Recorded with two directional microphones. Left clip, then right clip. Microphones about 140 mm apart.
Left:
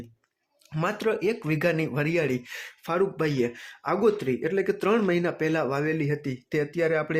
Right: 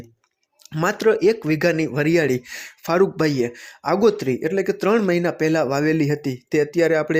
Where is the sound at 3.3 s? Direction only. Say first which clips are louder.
Right 4 dB; 30° right (ahead or behind).